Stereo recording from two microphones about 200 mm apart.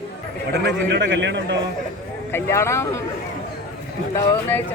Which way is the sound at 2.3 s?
10° left (ahead or behind).